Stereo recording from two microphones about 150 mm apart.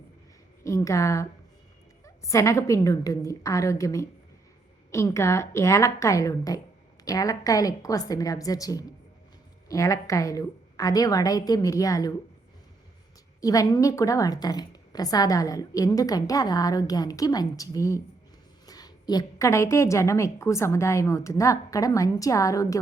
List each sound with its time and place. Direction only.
0.6 s a woman's voice: 20° left (ahead or behind)
13.4 s a woman's voice: 25° left (ahead or behind)